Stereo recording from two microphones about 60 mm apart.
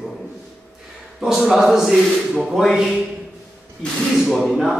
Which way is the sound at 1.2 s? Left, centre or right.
Centre.